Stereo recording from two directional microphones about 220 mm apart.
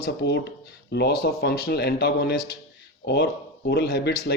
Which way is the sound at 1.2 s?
45° left (ahead or behind).